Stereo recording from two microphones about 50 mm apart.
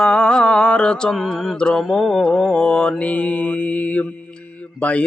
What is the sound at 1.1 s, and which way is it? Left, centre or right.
Mantra, centre.